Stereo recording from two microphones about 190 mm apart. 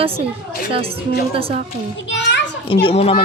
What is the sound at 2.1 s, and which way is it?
Children playing, 65° left (ahead or behind).